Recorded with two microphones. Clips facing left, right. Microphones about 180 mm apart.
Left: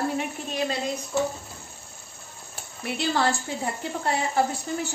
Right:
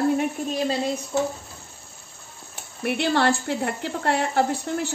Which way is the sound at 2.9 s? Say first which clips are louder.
Right 4 dB; 65° right (ahead or behind).